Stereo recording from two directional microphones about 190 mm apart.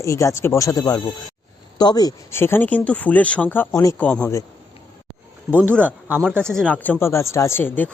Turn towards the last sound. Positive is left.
turn(degrees=10)  # may be behind; listen again after turning